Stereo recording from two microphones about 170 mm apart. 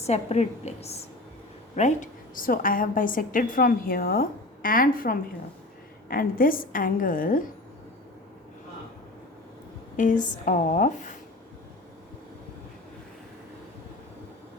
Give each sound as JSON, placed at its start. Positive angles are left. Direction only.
{"t": 0.0, "sound": "a woman's voice", "side_deg": 40}
{"t": 10.0, "sound": "speech", "side_deg": 50}